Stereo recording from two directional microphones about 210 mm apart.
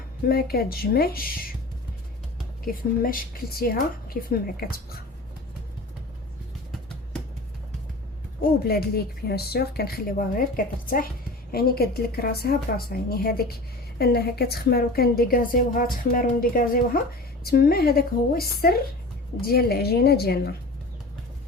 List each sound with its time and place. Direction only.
0.3 s a woman's voice: 45° left (ahead or behind)
3.0 s a woman's voice: 40° left (ahead or behind)
6.7 s music: 5° left (ahead or behind)
8.4 s a woman's voice: 45° left (ahead or behind)
11.5 s a woman's voice: 45° left (ahead or behind)